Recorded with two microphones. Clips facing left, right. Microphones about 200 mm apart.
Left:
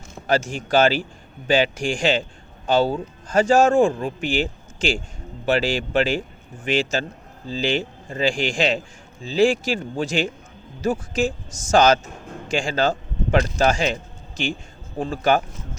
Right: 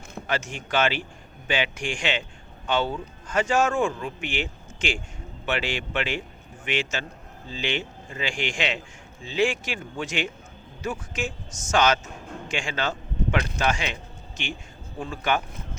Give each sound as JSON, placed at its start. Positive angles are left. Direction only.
{"t": 0.3, "sound": "a man's voice", "side_deg": 35}